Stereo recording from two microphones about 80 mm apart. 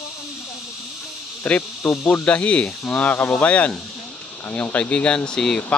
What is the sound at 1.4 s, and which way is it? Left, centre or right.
Speech, left.